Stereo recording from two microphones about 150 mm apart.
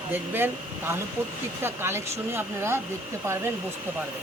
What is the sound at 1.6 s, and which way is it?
Speech, 15° right (ahead or behind).